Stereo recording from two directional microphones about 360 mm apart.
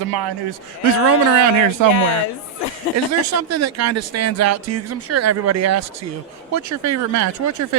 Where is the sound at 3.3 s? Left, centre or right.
Right.